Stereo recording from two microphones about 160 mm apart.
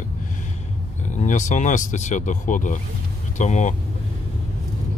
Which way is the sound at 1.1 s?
50° left (ahead or behind).